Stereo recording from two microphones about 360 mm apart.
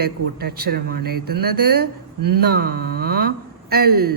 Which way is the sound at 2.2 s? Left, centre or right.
Right.